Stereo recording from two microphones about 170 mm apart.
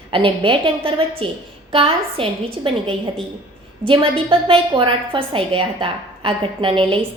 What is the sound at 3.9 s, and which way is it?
A woman's voice, 30° right (ahead or behind).